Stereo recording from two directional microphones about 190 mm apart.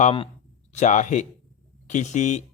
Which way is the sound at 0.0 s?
30° left (ahead or behind).